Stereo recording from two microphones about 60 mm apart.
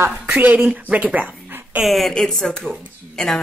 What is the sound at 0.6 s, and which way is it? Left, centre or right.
Speech, right.